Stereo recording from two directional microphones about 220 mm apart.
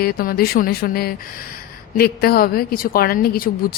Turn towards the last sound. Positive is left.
turn(degrees=45)  # may be behind; listen again after turning